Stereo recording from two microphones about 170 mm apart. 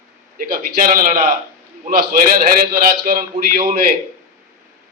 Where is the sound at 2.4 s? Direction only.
55° right (ahead or behind).